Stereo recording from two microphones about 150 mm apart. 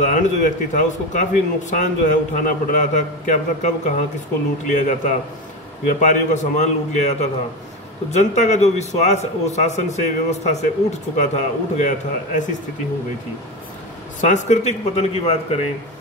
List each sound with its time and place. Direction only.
0.0 s a man's voice: 55° left (ahead or behind)
14.2 s a man's voice: 50° left (ahead or behind)